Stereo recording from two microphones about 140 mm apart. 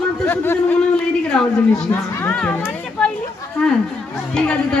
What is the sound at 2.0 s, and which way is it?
Speech, 15° left (ahead or behind).